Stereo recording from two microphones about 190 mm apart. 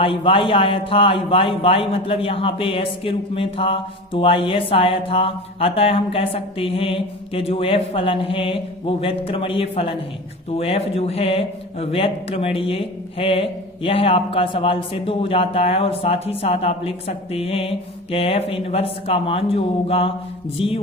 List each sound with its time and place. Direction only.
0.0 s a man's voice: 30° left (ahead or behind)